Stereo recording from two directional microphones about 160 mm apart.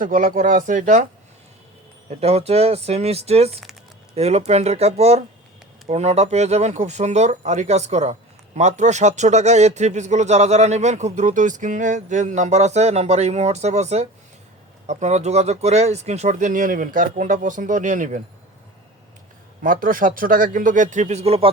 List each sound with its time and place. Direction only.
0.0 s speech: 55° right (ahead or behind)
2.0 s speech: 40° right (ahead or behind)
19.6 s speech: 60° right (ahead or behind); by 21.5 s 40° right (ahead or behind)